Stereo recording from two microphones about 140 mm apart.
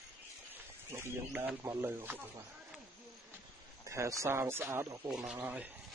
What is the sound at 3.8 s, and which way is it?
Speech, 20° right (ahead or behind).